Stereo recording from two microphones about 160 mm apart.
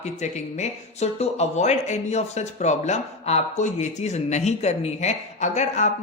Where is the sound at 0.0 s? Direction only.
45° left (ahead or behind).